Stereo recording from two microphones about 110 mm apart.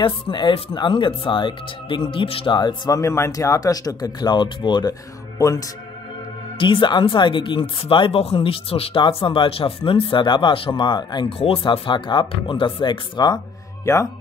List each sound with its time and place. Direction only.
0.0 s speech: 50° left (ahead or behind)
2.9 s speech: 25° left (ahead or behind); by 4.9 s 45° left (ahead or behind)
6.6 s speech: 50° left (ahead or behind)
9.0 s speech: 50° left (ahead or behind)
11.2 s speech: 60° left (ahead or behind)
13.9 s speech: 30° left (ahead or behind)